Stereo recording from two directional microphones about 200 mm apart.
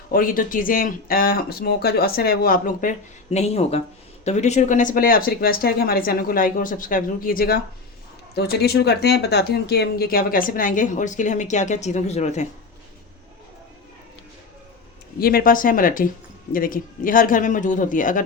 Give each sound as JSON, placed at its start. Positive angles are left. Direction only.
{"t": 0.1, "sound": "speech", "side_deg": 45}
{"t": 3.3, "sound": "speech", "side_deg": 30}
{"t": 15.2, "sound": "speech", "side_deg": 45}